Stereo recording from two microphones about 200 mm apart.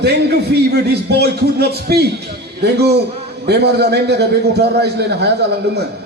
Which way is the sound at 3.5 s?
55° right (ahead or behind).